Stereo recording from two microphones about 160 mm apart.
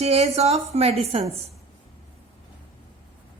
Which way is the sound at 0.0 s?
40° right (ahead or behind).